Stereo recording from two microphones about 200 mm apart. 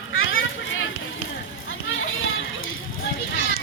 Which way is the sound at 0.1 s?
80° left.